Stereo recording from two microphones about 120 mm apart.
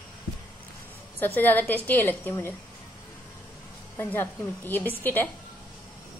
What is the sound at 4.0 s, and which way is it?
A woman's voice, 15° left (ahead or behind).